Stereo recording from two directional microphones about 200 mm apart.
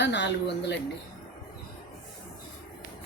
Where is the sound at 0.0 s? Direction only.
60° left (ahead or behind).